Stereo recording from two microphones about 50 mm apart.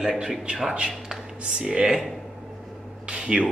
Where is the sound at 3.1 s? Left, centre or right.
Centre.